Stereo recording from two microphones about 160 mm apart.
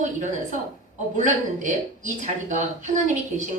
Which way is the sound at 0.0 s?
50° right (ahead or behind).